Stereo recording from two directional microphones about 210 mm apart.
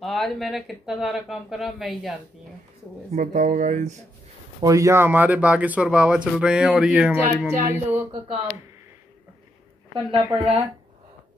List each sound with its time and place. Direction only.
0.0 s speech: centre (ahead or behind)
3.1 s speech: 35° right (ahead or behind)
4.6 s speech: 15° right (ahead or behind)
10.1 s speech: 30° right (ahead or behind)